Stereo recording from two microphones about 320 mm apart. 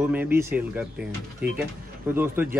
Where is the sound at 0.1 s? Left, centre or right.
Centre.